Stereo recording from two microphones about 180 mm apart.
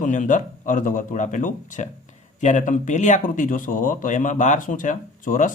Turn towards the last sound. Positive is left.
turn(degrees=45)  # may be behind; listen again after turning